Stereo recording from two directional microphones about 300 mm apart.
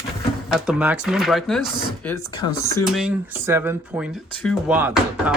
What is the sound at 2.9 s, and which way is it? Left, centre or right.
Speech, centre.